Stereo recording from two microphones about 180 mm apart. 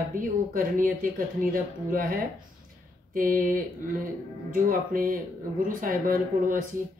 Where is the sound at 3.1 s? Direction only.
50° right (ahead or behind).